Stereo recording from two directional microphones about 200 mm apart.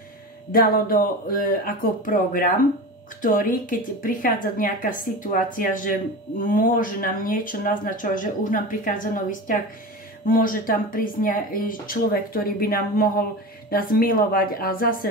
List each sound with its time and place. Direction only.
0.5 s speech: 45° left (ahead or behind)